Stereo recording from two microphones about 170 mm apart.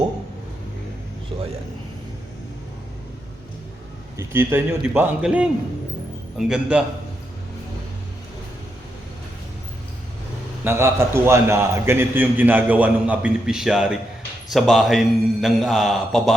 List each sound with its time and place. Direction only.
1.3 s a man's voice: 35° right (ahead or behind)
4.2 s a man's voice: 15° right (ahead or behind)
10.6 s a man's voice: 15° right (ahead or behind)